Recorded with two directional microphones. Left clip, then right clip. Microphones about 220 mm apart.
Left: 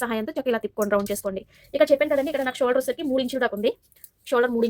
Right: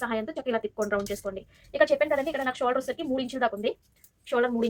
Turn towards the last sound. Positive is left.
turn(degrees=40)  # may be behind; listen again after turning